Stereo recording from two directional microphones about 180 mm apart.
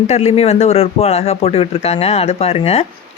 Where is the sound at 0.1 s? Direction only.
35° left (ahead or behind).